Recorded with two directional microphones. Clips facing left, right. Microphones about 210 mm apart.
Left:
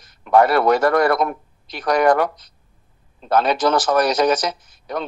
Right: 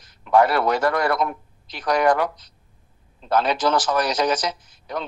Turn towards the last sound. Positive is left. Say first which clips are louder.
# left 3 dB
turn(degrees=50)  # may be behind; listen again after turning